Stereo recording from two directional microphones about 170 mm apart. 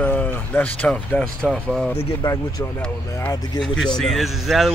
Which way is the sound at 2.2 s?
25° left (ahead or behind).